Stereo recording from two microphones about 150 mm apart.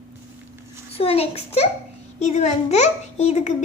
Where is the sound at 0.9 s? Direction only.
40° left (ahead or behind).